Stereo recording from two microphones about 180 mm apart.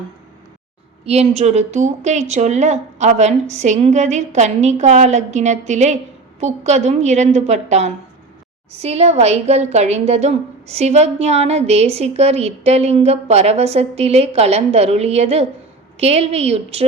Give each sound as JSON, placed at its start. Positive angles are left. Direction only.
{"t": 1.0, "sound": "a woman's voice", "side_deg": -35}